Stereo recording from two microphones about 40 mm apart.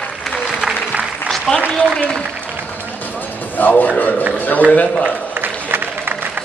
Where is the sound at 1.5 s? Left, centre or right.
Centre.